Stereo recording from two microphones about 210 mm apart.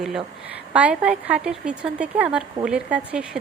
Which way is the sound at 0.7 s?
5° right (ahead or behind).